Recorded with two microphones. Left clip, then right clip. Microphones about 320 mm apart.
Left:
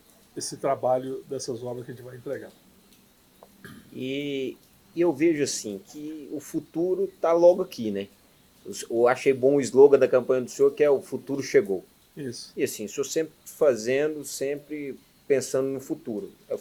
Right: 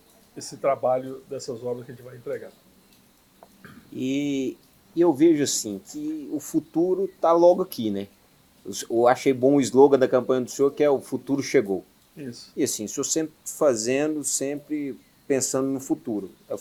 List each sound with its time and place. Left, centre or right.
0.3 s speech: left
4.1 s speech: right
4.9 s speech: right